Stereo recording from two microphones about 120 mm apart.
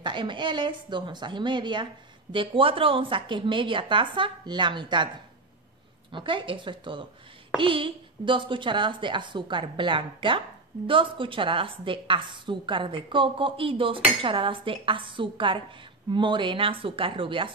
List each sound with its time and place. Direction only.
0.0 s a woman's voice: 45° right (ahead or behind)
6.1 s a woman's voice: 45° right (ahead or behind)